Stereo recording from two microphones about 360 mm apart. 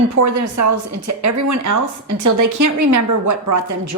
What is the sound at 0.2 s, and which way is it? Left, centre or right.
Speech, right.